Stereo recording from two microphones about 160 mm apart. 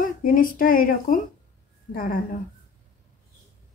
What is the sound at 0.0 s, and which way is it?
A woman's voice, 60° left (ahead or behind).